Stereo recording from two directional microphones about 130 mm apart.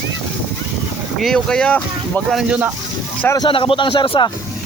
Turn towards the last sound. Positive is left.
turn(degrees=40)  # may be behind; listen again after turning